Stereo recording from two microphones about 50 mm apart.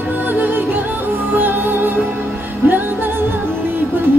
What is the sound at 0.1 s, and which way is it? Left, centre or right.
Music, right.